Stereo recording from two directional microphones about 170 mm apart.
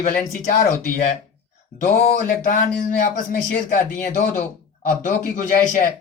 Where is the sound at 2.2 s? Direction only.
50° left (ahead or behind).